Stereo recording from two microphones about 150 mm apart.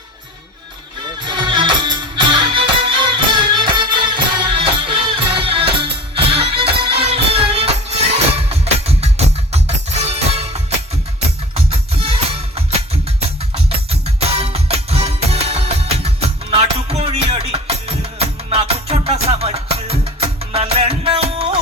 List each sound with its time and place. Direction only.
1.2 s music: 30° right (ahead or behind)
13.7 s music: 45° right (ahead or behind)